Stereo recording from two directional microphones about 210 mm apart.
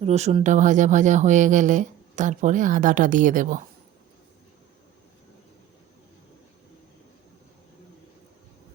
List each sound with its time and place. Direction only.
0.0 s speech: 30° right (ahead or behind)